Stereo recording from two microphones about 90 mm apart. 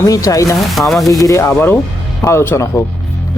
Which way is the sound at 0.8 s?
Centre (ahead or behind).